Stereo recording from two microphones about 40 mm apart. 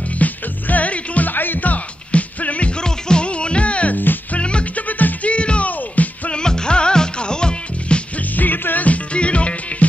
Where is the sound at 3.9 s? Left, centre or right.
Left.